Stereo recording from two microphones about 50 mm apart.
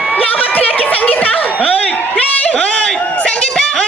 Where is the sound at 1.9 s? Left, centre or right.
Left.